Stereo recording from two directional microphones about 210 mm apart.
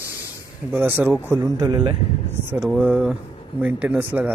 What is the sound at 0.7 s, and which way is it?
A man's voice, 10° right (ahead or behind).